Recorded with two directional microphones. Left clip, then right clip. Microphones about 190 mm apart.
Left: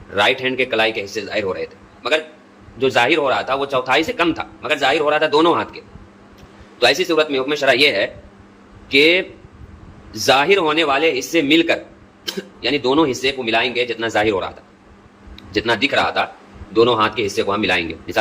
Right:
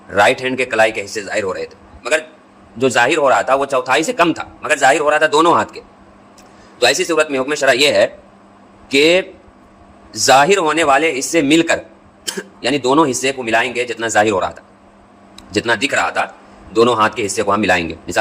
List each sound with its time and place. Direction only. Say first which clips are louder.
0.1 s a man's voice: right 4 dB; 40° right (ahead or behind)